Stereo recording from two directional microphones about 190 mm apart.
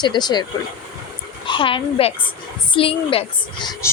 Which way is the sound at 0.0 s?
20° left (ahead or behind).